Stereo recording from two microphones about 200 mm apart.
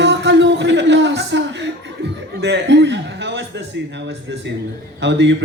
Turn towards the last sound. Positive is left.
turn(degrees=-60)  # may be behind; listen again after turning